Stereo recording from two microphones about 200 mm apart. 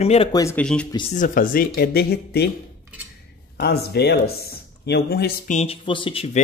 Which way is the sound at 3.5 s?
55° left (ahead or behind).